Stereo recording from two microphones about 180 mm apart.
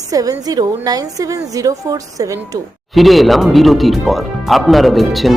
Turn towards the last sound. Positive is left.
turn(degrees=0)  # may be behind; listen again after turning